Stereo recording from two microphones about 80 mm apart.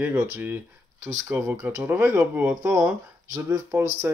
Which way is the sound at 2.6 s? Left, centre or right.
Right.